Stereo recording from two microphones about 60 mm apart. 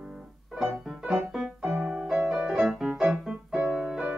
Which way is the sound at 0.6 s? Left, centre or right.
Centre.